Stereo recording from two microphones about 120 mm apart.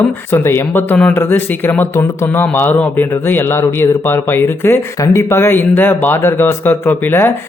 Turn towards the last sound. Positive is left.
turn(degrees=15)  # may be behind; listen again after turning